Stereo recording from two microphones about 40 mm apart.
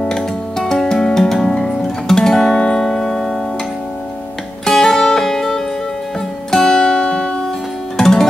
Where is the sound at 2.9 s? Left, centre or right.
Centre.